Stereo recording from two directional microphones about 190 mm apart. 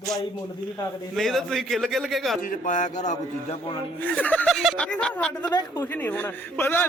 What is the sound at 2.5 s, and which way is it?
Speech, 40° left (ahead or behind).